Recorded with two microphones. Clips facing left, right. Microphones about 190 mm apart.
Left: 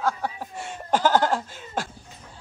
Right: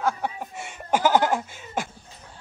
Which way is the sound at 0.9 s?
15° right (ahead or behind).